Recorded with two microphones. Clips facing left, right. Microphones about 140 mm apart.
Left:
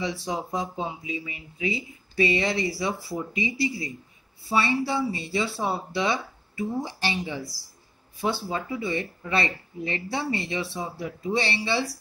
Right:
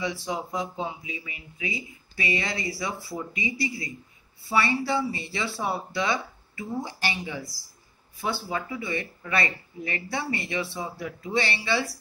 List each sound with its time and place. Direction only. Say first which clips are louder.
0.0 s speech: left 1 dB; 30° left (ahead or behind)